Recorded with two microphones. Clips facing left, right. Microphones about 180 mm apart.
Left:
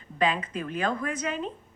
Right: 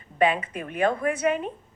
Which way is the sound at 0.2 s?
60° right (ahead or behind).